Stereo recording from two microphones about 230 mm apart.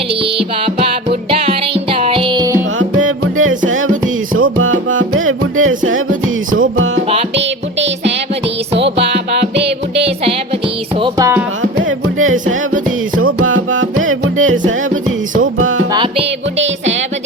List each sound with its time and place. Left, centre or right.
0.2 s music: right
2.7 s music: right
11.0 s speech: centre
11.8 s music: right
15.9 s music: centre